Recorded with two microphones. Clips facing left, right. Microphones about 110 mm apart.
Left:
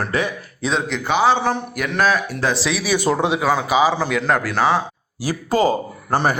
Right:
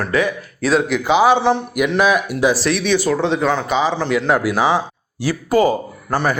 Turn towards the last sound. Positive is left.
turn(degrees=25)  # may be behind; listen again after turning